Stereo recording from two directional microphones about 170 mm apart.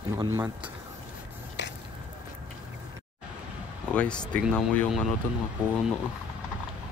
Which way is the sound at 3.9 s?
5° left (ahead or behind).